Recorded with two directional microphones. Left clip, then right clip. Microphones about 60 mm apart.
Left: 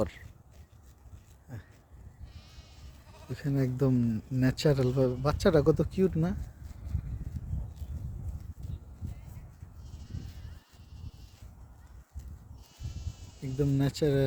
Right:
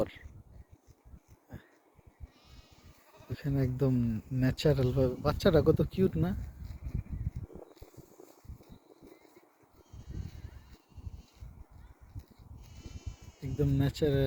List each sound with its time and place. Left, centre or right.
0.0 s a sound: left
3.1 s speech: left
13.5 s speech: left